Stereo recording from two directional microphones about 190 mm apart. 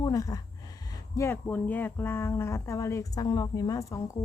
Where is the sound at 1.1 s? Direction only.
15° left (ahead or behind).